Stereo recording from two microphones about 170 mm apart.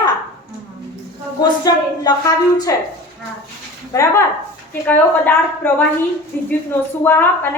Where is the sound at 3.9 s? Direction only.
20° left (ahead or behind).